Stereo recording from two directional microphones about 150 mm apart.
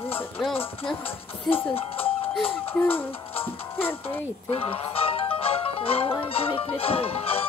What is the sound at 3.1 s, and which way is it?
Music, 40° left (ahead or behind).